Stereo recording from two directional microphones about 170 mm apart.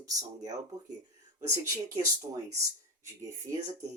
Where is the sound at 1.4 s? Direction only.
20° right (ahead or behind).